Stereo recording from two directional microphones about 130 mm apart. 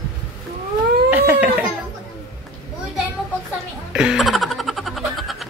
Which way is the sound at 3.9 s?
5° right (ahead or behind).